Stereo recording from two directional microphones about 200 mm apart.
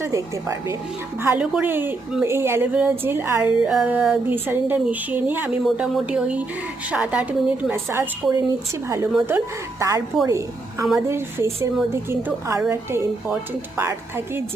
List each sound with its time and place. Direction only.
0.0 s a woman's voice: 15° right (ahead or behind)